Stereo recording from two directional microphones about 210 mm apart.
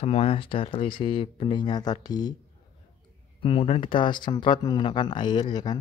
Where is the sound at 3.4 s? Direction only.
25° left (ahead or behind).